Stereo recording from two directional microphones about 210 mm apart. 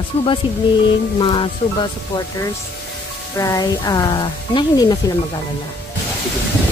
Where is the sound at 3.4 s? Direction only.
15° left (ahead or behind).